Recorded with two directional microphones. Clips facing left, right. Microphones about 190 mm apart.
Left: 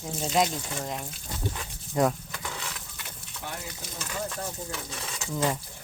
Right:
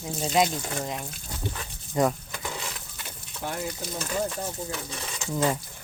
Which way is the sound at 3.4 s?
45° right (ahead or behind).